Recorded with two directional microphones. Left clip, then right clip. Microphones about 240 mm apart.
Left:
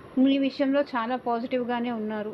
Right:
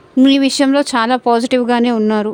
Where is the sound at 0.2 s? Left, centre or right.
Right.